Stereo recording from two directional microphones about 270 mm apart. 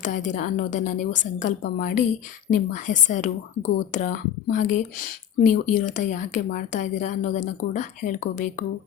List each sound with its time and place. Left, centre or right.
0.0 s a woman's voice: left